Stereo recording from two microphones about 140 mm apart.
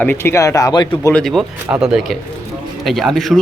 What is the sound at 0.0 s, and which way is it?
Speech, 15° left (ahead or behind).